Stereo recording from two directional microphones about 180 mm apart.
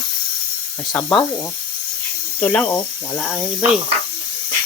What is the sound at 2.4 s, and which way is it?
Speech, 5° left (ahead or behind).